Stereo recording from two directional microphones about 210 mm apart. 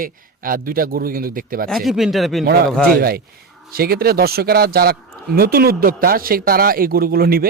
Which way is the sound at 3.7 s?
45° right (ahead or behind).